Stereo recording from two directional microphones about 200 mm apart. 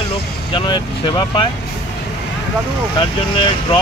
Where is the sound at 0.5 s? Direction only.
25° left (ahead or behind).